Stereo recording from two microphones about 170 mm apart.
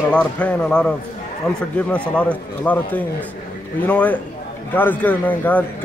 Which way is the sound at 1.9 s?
5° left (ahead or behind).